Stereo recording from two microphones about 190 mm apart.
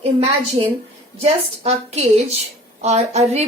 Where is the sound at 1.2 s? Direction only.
35° right (ahead or behind).